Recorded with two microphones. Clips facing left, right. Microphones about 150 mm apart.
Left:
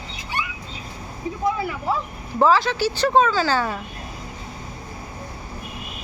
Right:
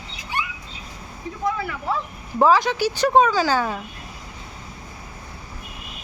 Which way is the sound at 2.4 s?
15° right (ahead or behind).